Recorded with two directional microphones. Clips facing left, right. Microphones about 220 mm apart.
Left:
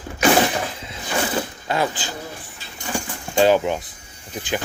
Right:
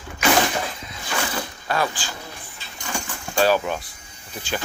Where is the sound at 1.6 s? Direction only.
20° left (ahead or behind).